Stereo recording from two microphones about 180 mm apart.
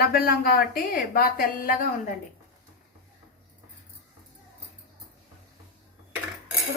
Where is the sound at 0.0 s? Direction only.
55° left (ahead or behind).